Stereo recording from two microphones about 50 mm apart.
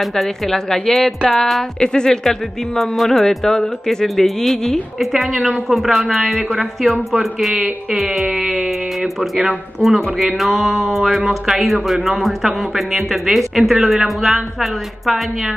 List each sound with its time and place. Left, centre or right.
0.1 s a woman's voice: centre
7.5 s speech: right
8.0 s speech: centre
8.3 s speech: right
8.6 s speech: centre